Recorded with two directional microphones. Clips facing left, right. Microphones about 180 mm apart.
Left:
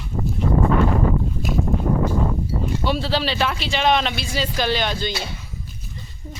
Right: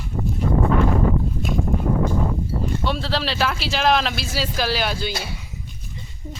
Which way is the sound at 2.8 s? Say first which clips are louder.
Left 4 dB; centre (ahead or behind).